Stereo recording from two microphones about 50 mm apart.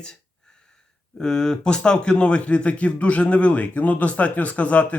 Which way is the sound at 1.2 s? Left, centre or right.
Centre.